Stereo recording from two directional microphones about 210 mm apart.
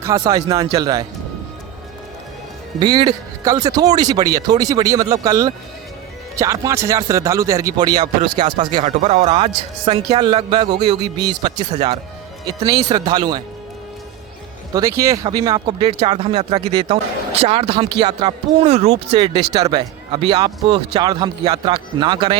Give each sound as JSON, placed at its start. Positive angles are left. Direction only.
{"t": 0.0, "sound": "speech", "side_deg": -15}
{"t": 2.7, "sound": "speech", "side_deg": -20}
{"t": 11.7, "sound": "speech", "side_deg": -30}
{"t": 12.5, "sound": "speech", "side_deg": -20}
{"t": 14.7, "sound": "speech", "side_deg": -15}